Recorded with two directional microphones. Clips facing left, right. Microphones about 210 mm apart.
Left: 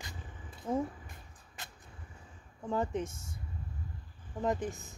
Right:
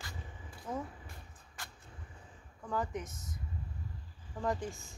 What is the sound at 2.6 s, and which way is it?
Speech, 25° left (ahead or behind).